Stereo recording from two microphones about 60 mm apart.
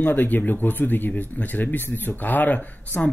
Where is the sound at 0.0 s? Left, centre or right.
Left.